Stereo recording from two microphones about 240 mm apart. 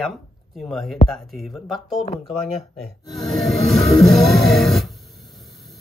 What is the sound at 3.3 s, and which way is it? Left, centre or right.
Music, centre.